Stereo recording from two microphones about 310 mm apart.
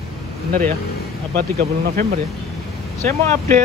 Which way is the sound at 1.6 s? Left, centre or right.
Right.